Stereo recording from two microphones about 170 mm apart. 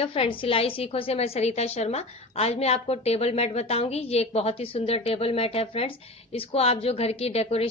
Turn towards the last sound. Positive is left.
turn(degrees=35)  # may be behind; listen again after turning